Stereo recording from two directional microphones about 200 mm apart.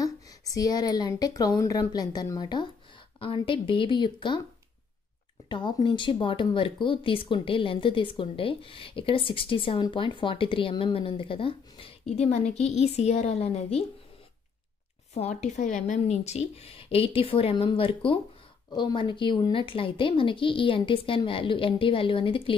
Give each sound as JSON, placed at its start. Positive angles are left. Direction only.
{"t": 0.0, "sound": "speech", "side_deg": 20}
{"t": 5.5, "sound": "speech", "side_deg": 25}
{"t": 15.1, "sound": "speech", "side_deg": 35}